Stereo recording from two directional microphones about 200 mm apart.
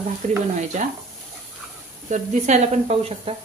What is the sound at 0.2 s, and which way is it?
Speech, 35° right (ahead or behind).